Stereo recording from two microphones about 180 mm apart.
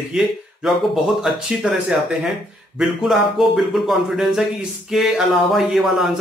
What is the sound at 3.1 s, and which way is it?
A man's voice, centre (ahead or behind).